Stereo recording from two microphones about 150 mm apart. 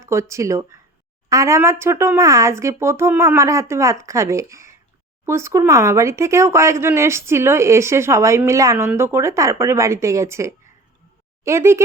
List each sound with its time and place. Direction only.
0.0 s speech: 20° right (ahead or behind)